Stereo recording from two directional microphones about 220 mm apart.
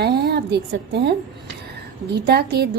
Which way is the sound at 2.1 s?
45° right (ahead or behind).